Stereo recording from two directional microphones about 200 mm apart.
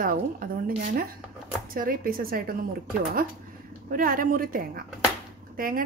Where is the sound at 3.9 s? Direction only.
45° right (ahead or behind).